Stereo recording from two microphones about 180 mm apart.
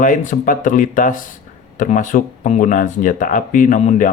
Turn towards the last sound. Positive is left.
turn(degrees=45)  # may be behind; listen again after turning